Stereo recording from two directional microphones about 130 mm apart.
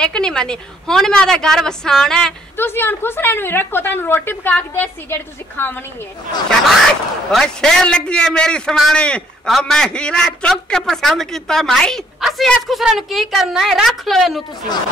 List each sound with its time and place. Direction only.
0.0 s a man's voice: 5° left (ahead or behind)
2.5 s a woman's voice: 15° left (ahead or behind)
7.2 s a man's voice: 5° left (ahead or behind)